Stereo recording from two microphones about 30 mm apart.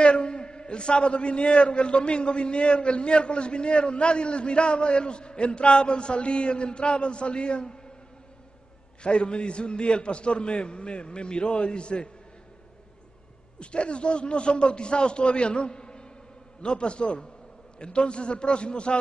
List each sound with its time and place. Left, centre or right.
0.0 s a man's voice: left
9.0 s a man's voice: left
13.6 s a man's voice: left